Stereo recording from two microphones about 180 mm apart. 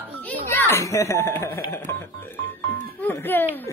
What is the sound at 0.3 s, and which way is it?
A child's voice, 10° left (ahead or behind).